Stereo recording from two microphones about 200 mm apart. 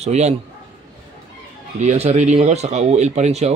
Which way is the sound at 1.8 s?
35° right (ahead or behind).